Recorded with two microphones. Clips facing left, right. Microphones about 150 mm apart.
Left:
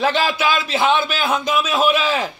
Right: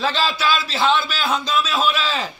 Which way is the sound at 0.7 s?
20° left (ahead or behind).